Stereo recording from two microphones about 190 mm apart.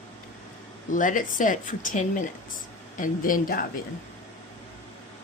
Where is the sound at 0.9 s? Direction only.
45° left (ahead or behind).